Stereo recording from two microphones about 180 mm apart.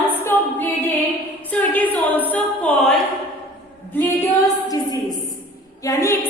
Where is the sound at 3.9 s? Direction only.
10° left (ahead or behind).